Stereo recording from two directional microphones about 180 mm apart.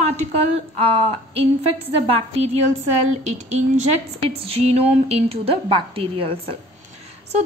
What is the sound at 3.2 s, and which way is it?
A woman's voice, 40° right (ahead or behind).